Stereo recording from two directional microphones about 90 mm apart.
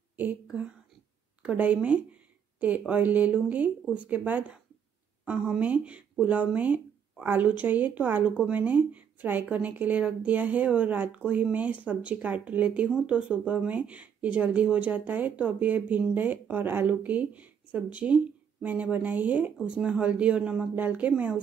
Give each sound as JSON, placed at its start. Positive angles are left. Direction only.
{"t": 0.2, "sound": "speech", "side_deg": -15}